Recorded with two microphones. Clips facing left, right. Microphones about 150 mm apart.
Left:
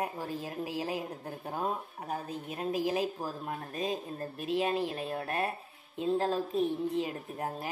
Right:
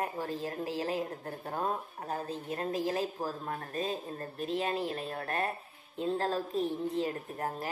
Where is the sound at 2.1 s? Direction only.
10° left (ahead or behind).